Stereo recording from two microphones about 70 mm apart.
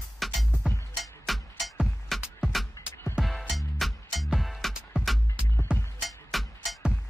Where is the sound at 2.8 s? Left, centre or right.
Left.